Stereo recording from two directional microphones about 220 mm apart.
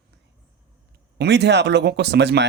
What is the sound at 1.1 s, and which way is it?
Speech, 50° right (ahead or behind).